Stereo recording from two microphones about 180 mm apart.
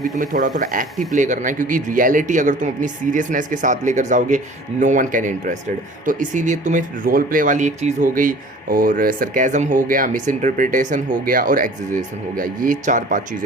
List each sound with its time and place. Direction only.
0.0 s speech: 45° right (ahead or behind)